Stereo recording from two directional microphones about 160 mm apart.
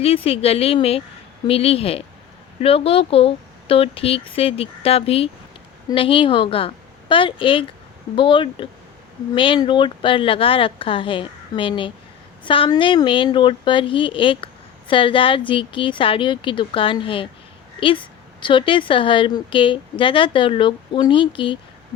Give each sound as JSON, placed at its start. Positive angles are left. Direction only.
{"t": 0.0, "sound": "speech", "side_deg": 35}
{"t": 18.3, "sound": "speech", "side_deg": 30}